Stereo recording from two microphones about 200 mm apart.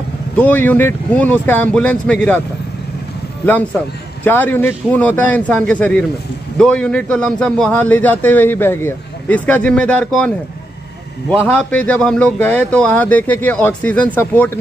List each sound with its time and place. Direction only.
0.4 s a man's voice: 10° left (ahead or behind)
3.4 s a man's voice: 10° left (ahead or behind)